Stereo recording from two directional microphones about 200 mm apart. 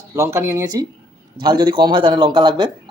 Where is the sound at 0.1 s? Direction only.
15° right (ahead or behind).